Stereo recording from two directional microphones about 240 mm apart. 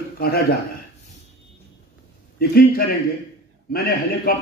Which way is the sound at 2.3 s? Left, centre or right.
Left.